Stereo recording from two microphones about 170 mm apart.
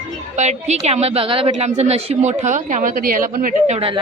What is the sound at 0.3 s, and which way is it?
Speech, 40° right (ahead or behind).